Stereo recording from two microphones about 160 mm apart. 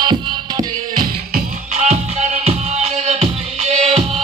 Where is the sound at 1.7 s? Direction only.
45° right (ahead or behind).